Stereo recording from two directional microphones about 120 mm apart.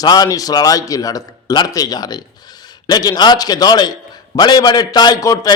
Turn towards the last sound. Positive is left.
turn(degrees=30)  # may be behind; listen again after turning